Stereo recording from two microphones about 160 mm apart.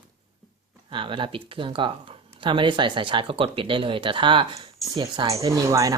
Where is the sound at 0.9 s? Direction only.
30° right (ahead or behind).